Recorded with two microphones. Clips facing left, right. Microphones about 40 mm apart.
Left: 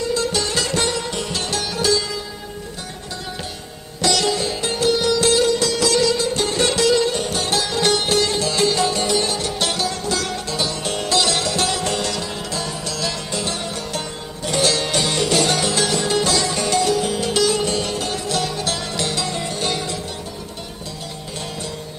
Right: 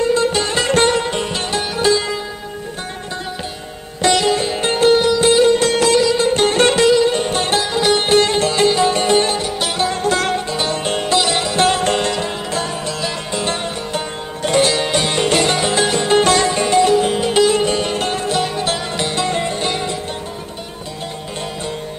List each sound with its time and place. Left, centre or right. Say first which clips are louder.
0.0 s music: right 5 dB; right
4.3 s sitar: right 5 dB; right
5.0 s music: right 4 dB; right
5.5 s music: right 4 dB; right
7.6 s music: right 3 dB; right
7.9 s music: right 5 dB; right
9.4 s music: right 2 dB; centre
9.7 s music: right 6 dB; right
11.2 s sitar: right 2 dB; centre
11.5 s music: right 6 dB; right
14.6 s music: even; right
17.9 s music: right 5 dB; right